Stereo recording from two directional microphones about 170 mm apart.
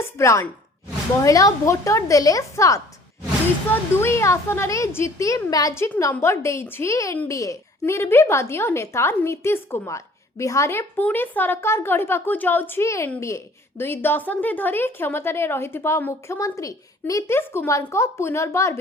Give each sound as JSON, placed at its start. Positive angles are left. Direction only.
{"t": 0.0, "sound": "a woman's voice", "side_deg": 15}